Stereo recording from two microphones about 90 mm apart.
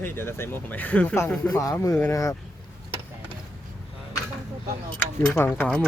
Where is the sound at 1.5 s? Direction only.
40° left (ahead or behind).